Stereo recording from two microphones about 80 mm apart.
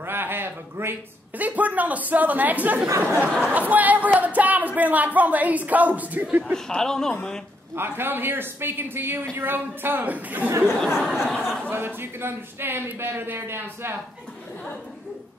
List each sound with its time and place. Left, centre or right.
0.0 s a man's voice: right
6.5 s speech: centre
7.7 s a man's voice: right
10.8 s speech: centre
11.7 s a man's voice: right